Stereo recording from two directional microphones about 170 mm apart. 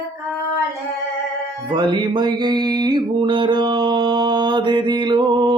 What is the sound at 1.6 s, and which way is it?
Music, 25° right (ahead or behind).